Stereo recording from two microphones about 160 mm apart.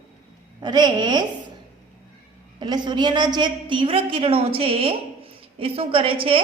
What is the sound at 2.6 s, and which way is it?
A woman's voice, 30° right (ahead or behind).